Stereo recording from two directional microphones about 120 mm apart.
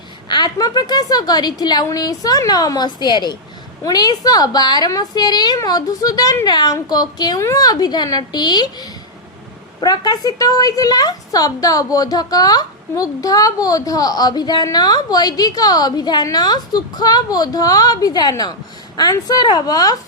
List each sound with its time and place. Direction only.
0.3 s speech: 35° left (ahead or behind)